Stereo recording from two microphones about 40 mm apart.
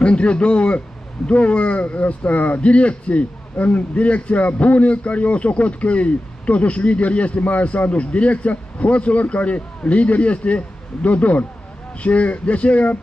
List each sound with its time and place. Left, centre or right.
0.0 s a man's voice: left